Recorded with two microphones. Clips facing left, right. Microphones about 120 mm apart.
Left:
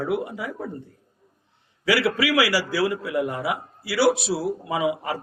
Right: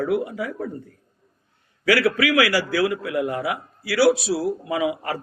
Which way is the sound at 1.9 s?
25° left (ahead or behind).